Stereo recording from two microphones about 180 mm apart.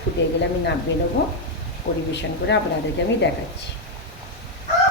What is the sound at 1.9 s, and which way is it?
Speech, 75° left (ahead or behind).